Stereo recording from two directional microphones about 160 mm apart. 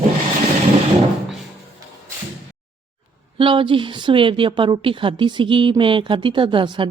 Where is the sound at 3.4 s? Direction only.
30° right (ahead or behind).